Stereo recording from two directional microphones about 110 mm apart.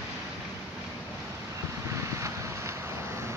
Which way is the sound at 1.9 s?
25° right (ahead or behind).